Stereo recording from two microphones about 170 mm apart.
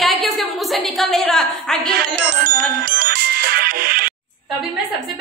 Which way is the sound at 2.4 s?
60° right (ahead or behind).